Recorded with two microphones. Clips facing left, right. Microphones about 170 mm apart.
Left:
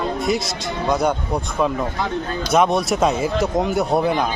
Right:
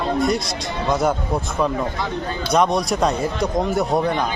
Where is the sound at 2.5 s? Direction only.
5° left (ahead or behind).